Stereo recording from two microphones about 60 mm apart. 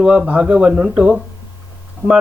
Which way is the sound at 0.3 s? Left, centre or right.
Right.